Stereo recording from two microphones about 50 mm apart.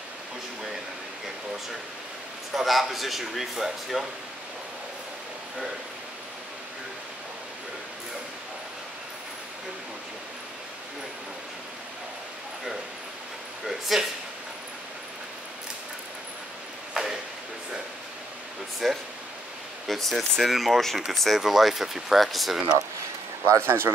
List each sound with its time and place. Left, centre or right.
2.5 s speech: centre
13.7 s speech: centre
16.9 s a sound: centre
18.8 s speech: centre
23.6 s speech: right